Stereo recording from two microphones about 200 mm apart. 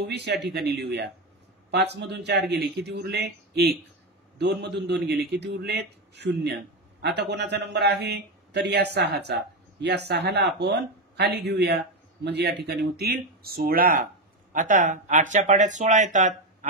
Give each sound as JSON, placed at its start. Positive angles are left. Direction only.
{"t": 0.0, "sound": "a man's voice", "side_deg": -55}